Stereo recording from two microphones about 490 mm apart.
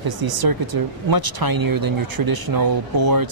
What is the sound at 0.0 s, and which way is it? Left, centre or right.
Speech, right.